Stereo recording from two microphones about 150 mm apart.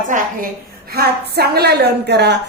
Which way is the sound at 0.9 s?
90° right.